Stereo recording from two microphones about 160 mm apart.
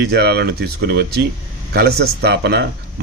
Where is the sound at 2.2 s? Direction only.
90° right.